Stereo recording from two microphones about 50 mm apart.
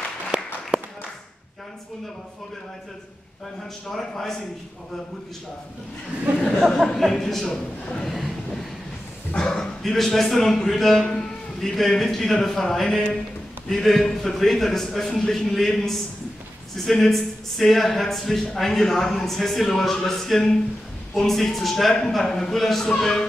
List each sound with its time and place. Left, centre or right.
0.3 s a sound: centre
3.9 s a man's voice: centre
7.0 s a woman's voice: centre
7.4 s a man's voice: centre
8.0 s a woman's voice: centre
9.3 s a man's voice: centre